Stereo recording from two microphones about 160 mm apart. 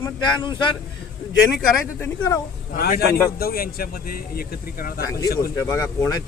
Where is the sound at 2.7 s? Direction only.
70° left (ahead or behind).